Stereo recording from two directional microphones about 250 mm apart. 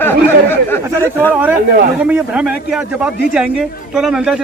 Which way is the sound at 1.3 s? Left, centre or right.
Centre.